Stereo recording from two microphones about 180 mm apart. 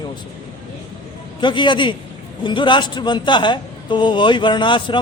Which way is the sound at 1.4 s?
25° left (ahead or behind).